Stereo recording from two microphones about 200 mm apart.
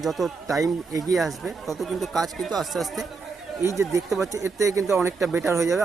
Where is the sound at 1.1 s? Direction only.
Centre (ahead or behind).